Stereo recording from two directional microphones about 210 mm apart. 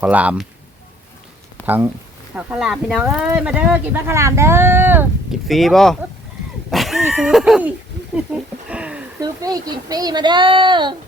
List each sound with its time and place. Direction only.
0.0 s speech: 5° right (ahead or behind)
1.6 s speech: 10° right (ahead or behind)
6.7 s a sound: centre (ahead or behind)
9.2 s speech: 15° right (ahead or behind)